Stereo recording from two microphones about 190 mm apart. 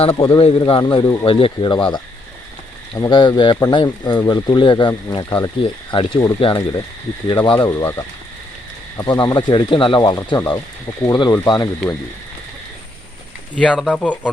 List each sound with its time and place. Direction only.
0.0 s speech: 30° left (ahead or behind)
13.6 s speech: 5° left (ahead or behind)